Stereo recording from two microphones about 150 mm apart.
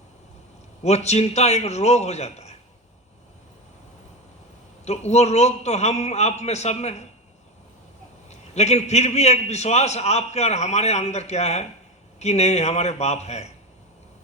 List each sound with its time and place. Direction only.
0.8 s a man's voice: 45° left (ahead or behind)
4.9 s a man's voice: 45° left (ahead or behind)
8.3 s a man's voice: 45° left (ahead or behind)